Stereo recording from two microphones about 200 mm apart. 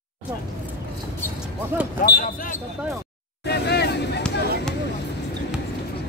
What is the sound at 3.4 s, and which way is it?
Vehicle, 55° left (ahead or behind).